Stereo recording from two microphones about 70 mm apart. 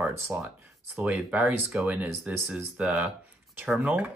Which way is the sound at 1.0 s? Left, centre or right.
Centre.